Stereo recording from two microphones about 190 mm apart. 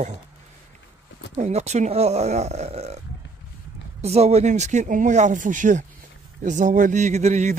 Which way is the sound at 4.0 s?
35° right (ahead or behind).